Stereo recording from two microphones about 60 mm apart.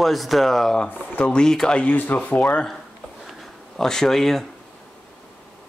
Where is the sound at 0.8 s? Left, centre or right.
Left.